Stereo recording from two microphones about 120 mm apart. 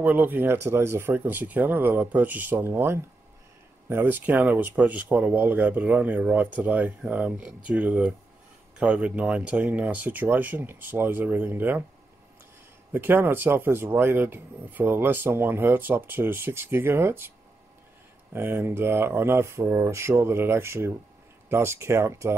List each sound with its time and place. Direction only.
0.0 s speech: 15° right (ahead or behind)
12.9 s speech: 20° right (ahead or behind)
18.3 s speech: 20° right (ahead or behind)